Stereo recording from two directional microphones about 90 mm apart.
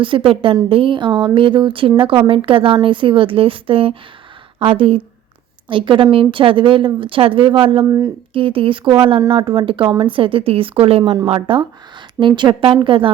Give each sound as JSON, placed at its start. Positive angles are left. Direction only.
{"t": 0.0, "sound": "a woman's voice", "side_deg": -75}
{"t": 2.0, "sound": "a woman's voice", "side_deg": -80}
{"t": 5.6, "sound": "a woman's voice", "side_deg": -65}
{"t": 7.9, "sound": "speech", "side_deg": -30}
{"t": 8.3, "sound": "a woman's voice", "side_deg": -75}
{"t": 11.3, "sound": "a woman's voice", "side_deg": -80}
{"t": 12.2, "sound": "a woman's voice", "side_deg": -60}